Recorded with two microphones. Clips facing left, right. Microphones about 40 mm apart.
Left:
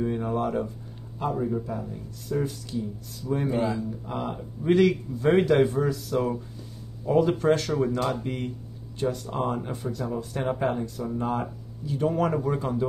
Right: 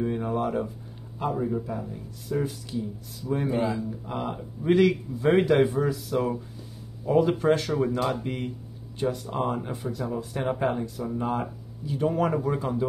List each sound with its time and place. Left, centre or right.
0.0 s speech: centre